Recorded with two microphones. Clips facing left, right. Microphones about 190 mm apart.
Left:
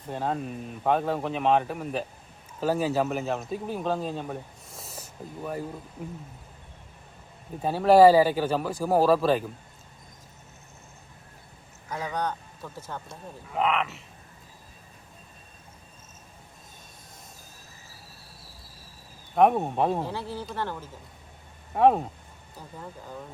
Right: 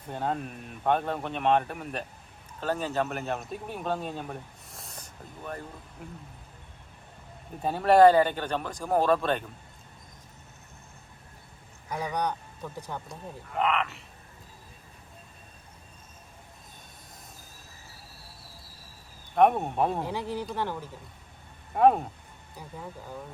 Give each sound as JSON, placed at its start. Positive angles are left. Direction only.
{"t": 0.1, "sound": "speech", "side_deg": 0}
{"t": 7.6, "sound": "speech", "side_deg": 0}
{"t": 11.9, "sound": "speech", "side_deg": -15}
{"t": 13.1, "sound": "speech", "side_deg": 0}
{"t": 19.4, "sound": "speech", "side_deg": 0}
{"t": 20.1, "sound": "speech", "side_deg": -15}
{"t": 21.8, "sound": "speech", "side_deg": 0}